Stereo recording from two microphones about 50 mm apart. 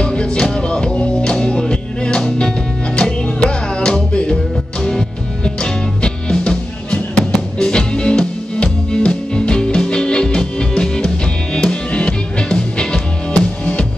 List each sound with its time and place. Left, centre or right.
0.0 s music: centre